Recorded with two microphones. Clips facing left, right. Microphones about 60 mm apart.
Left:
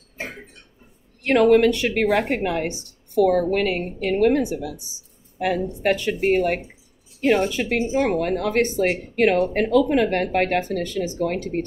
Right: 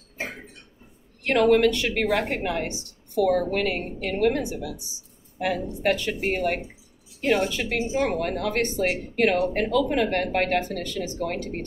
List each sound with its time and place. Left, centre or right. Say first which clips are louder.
1.2 s a woman's voice: left 3 dB; left